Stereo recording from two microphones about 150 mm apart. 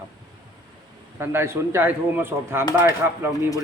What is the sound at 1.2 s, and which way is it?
A man's voice, 15° right (ahead or behind).